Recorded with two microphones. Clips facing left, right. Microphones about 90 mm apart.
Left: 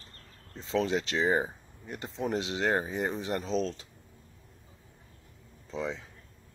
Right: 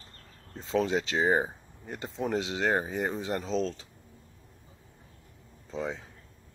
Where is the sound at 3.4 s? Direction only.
20° left (ahead or behind).